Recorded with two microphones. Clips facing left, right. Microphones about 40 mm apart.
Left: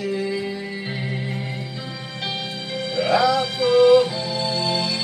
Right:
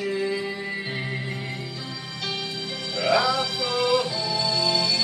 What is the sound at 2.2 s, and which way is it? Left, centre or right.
Music, left.